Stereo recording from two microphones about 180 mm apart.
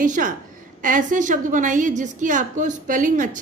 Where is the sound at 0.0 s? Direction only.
45° right (ahead or behind).